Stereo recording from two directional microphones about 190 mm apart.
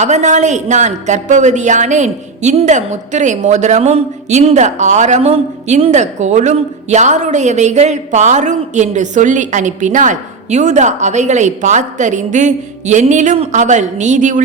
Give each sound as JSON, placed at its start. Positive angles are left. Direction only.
{"t": 0.0, "sound": "speech", "side_deg": -40}